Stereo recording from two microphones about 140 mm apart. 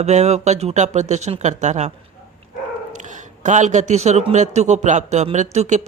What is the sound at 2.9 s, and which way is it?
A man's voice, 60° right (ahead or behind).